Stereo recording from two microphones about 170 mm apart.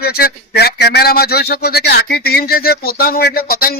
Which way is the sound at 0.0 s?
65° left (ahead or behind).